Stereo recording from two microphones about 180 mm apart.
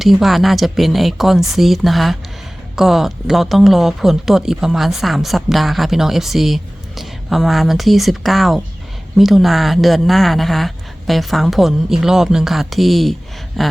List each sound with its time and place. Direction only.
0.0 s speech: centre (ahead or behind)